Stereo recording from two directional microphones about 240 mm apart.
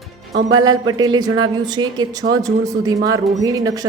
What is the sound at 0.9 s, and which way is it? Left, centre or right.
Speech, centre.